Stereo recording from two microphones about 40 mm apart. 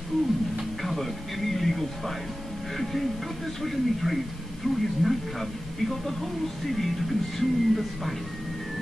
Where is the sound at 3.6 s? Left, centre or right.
Centre.